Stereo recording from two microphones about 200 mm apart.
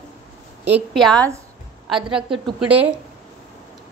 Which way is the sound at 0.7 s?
5° right (ahead or behind).